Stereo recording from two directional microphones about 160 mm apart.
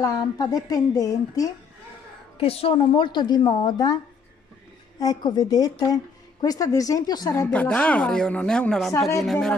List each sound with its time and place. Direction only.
0.0 s a woman's voice: 25° left (ahead or behind)
2.4 s a woman's voice: 35° left (ahead or behind)
7.5 s speech: 10° left (ahead or behind)